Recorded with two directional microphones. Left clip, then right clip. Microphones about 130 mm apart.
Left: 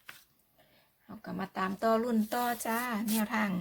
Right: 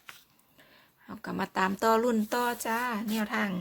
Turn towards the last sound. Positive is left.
turn(degrees=-10)  # may be behind; listen again after turning